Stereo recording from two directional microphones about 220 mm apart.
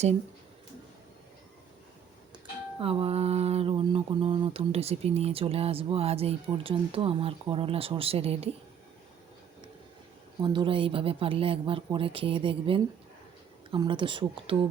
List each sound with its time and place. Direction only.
2.3 s speech: 25° right (ahead or behind)
10.4 s speech: 20° right (ahead or behind)